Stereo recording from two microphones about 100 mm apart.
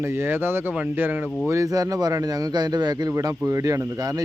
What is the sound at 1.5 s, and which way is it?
Speech, 35° right (ahead or behind).